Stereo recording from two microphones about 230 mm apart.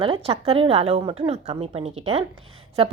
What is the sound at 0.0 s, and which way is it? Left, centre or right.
Speech, right.